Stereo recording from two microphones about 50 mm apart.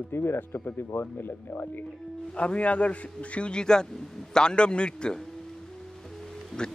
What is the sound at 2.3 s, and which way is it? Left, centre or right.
A man's voice, left.